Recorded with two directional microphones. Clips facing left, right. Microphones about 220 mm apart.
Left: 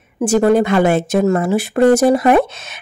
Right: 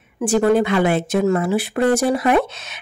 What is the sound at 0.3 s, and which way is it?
Speech, 40° left (ahead or behind).